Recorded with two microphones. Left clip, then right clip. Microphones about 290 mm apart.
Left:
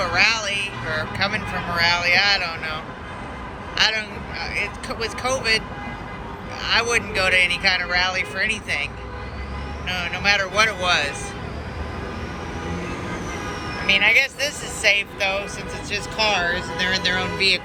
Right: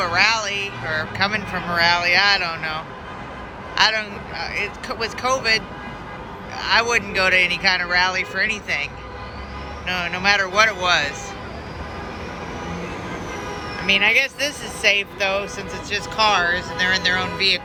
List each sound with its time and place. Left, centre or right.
0.0 s speech: centre
13.8 s speech: centre